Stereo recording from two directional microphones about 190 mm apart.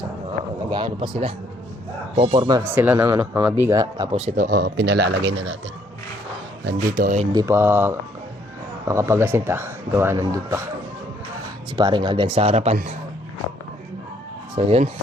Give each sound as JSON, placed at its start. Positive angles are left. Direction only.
{"t": 0.7, "sound": "speech", "side_deg": -25}
{"t": 2.5, "sound": "speech", "side_deg": -15}
{"t": 4.1, "sound": "speech", "side_deg": -35}
{"t": 4.4, "sound": "speech", "side_deg": -55}
{"t": 6.7, "sound": "speech", "side_deg": -50}
{"t": 7.3, "sound": "speech", "side_deg": -15}
{"t": 11.8, "sound": "speech", "side_deg": -25}
{"t": 14.5, "sound": "speech", "side_deg": -30}